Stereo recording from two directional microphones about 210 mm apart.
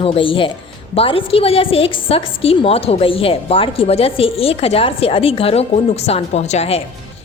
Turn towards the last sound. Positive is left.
turn(degrees=30)  # may be behind; listen again after turning